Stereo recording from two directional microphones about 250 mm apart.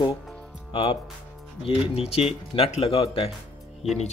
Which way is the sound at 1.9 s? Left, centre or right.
Left.